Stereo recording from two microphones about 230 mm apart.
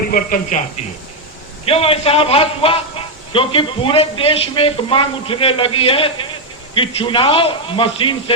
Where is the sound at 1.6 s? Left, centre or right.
Left.